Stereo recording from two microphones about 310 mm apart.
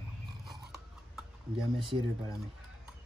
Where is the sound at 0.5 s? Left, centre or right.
Centre.